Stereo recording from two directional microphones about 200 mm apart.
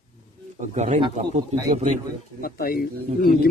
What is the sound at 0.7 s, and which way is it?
A man's voice, 35° right (ahead or behind).